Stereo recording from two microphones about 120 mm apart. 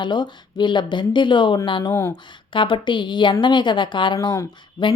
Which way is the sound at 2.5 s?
45° left (ahead or behind).